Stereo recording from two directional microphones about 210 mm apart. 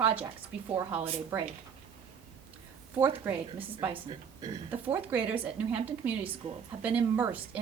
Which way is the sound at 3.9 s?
25° right (ahead or behind).